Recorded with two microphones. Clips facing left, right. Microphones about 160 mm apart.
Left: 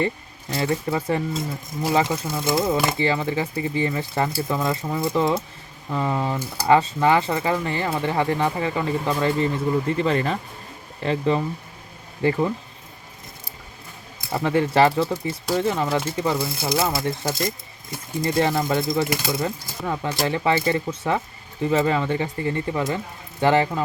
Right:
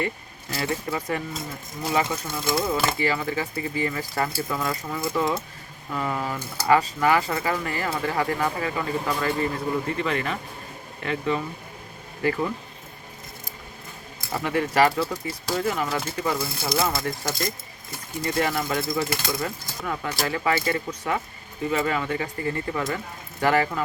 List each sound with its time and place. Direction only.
0.5 s speech: 30° left (ahead or behind)
2.0 s speech: 15° left (ahead or behind)
14.3 s speech: 30° left (ahead or behind)
16.9 s speech: 10° left (ahead or behind)
18.2 s speech: 30° left (ahead or behind)
18.8 s speech: 20° left (ahead or behind)